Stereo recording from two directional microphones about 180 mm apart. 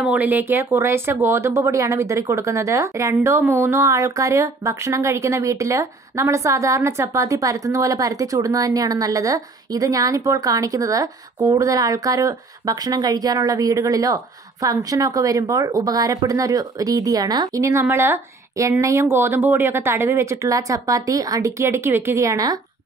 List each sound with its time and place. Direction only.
0.0 s speech: 10° right (ahead or behind)